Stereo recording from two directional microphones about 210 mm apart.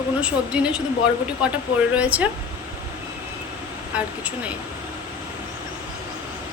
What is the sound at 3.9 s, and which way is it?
Speech, 5° right (ahead or behind).